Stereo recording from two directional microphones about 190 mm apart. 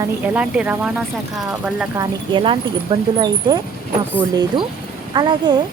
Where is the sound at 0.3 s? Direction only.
5° right (ahead or behind).